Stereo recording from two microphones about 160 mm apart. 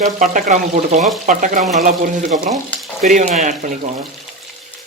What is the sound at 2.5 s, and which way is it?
Frying, centre (ahead or behind).